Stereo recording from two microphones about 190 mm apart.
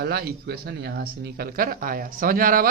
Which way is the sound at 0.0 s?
55° right (ahead or behind).